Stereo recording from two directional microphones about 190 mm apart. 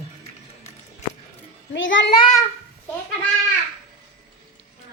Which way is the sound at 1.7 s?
80° left.